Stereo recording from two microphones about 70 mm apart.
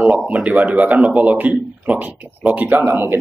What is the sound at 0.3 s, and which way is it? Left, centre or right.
Speech, centre.